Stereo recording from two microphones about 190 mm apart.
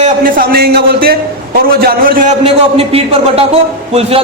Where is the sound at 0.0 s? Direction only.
50° right (ahead or behind).